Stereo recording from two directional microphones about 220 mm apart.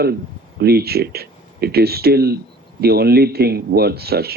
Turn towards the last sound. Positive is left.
turn(degrees=-45)  # may be behind; listen again after turning